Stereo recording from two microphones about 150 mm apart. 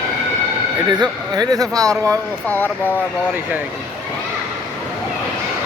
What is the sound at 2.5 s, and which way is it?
Speech, 10° left (ahead or behind).